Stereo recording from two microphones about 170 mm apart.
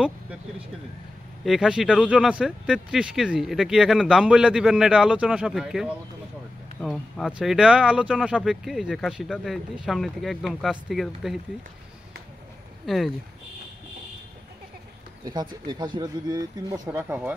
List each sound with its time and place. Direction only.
1.4 s speech: centre (ahead or behind)
12.8 s speech: centre (ahead or behind)
15.6 s speech: 25° right (ahead or behind)